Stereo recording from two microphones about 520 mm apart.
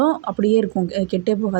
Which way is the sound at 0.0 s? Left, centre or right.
Left.